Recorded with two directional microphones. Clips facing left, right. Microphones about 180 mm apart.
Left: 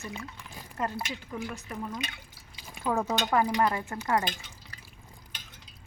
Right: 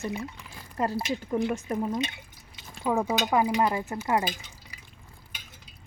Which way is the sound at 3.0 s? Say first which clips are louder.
Right 2 dB; 10° right (ahead or behind).